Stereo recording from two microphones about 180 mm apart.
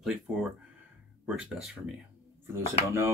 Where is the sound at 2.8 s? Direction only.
15° right (ahead or behind).